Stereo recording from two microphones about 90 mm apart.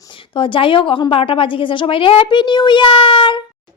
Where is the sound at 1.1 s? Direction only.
85° left; by 3.4 s 65° left (ahead or behind).